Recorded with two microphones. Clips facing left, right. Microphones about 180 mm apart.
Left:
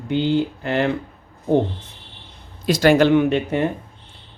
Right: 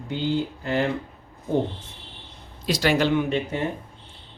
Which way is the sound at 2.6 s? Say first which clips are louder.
Left 7 dB; 50° left (ahead or behind).